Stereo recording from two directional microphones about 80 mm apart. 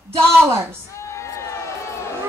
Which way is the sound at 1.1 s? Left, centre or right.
Left.